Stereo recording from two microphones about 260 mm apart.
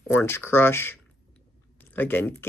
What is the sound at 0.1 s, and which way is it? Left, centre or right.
Speech, centre.